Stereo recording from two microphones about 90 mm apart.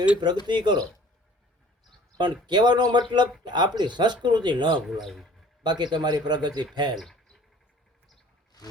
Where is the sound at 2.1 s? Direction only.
55° right (ahead or behind).